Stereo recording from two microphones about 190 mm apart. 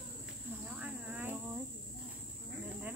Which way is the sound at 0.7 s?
5° right (ahead or behind).